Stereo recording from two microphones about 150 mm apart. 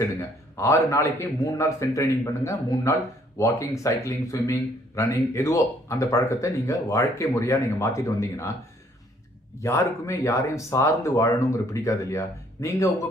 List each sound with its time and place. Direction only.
0.0 s a man's voice: 20° left (ahead or behind)
9.6 s a man's voice: 20° left (ahead or behind)